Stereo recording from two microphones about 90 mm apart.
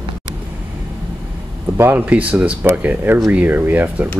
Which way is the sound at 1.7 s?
20° right (ahead or behind).